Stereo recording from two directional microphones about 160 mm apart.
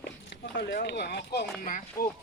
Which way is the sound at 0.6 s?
90° left.